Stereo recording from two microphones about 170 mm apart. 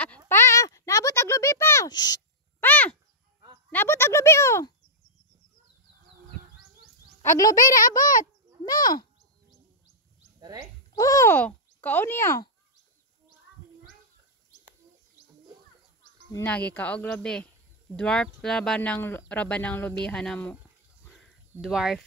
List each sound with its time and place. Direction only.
0.3 s a sound: 15° left (ahead or behind)
2.6 s a sound: 10° left (ahead or behind)
3.7 s speech: 15° left (ahead or behind)
7.2 s speech: 20° left (ahead or behind)
8.0 s speech: 50° left (ahead or behind)
8.6 s speech: 25° left (ahead or behind)
10.4 s speech: 25° right (ahead or behind)
11.0 s speech: 20° left (ahead or behind)
16.3 s speech: 10° left (ahead or behind)
21.1 s a sound: centre (ahead or behind)